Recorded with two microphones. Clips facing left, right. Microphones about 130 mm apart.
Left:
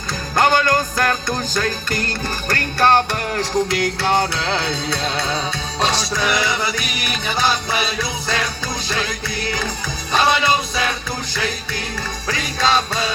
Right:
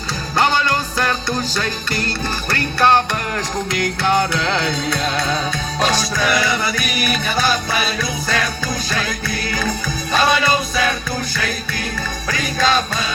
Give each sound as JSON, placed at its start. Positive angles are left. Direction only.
{"t": 0.3, "sound": "music", "side_deg": 45}
{"t": 12.3, "sound": "music", "side_deg": 25}